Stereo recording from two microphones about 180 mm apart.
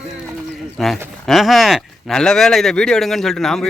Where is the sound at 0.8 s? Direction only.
Centre (ahead or behind).